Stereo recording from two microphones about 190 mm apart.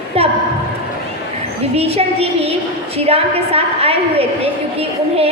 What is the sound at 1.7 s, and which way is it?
A woman's voice, 30° right (ahead or behind).